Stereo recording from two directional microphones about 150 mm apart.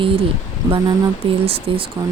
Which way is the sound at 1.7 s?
35° right (ahead or behind).